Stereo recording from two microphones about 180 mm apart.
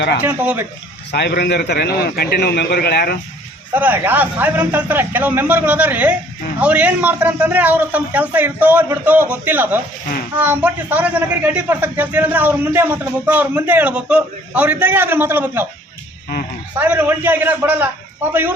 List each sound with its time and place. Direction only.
0.3 s a man's voice: 10° right (ahead or behind)
1.1 s a man's voice: 60° left (ahead or behind)
3.8 s a man's voice: 10° right (ahead or behind)
16.7 s a man's voice: 10° right (ahead or behind)